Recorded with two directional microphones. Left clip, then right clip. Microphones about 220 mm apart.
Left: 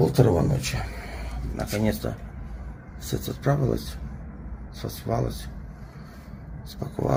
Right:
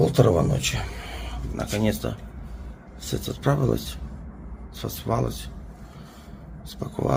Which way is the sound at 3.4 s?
20° right (ahead or behind).